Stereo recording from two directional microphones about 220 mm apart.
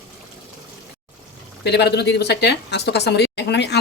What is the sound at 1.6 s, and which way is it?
Speech, 50° left (ahead or behind).